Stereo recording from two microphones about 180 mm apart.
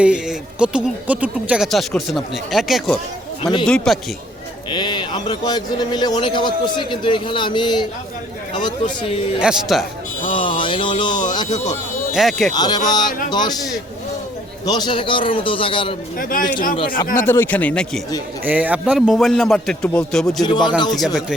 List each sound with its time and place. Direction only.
0.0 s speech: 5° right (ahead or behind)
3.4 s a man's voice: 25° left (ahead or behind)
4.7 s a man's voice: 25° left (ahead or behind)
9.4 s speech: centre (ahead or behind)
10.2 s speech: 30° left (ahead or behind)
12.1 s speech: centre (ahead or behind)
12.5 s a man's voice: 25° left (ahead or behind)
14.7 s a man's voice: 25° left (ahead or behind)
16.1 s speech: 50° left (ahead or behind)
17.2 s speech: 10° left (ahead or behind)
18.4 s speech: 10° right (ahead or behind)
20.4 s a man's voice: 25° left (ahead or behind)